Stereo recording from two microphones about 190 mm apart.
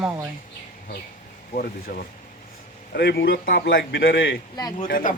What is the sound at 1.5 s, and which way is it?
A man's voice, 45° left (ahead or behind).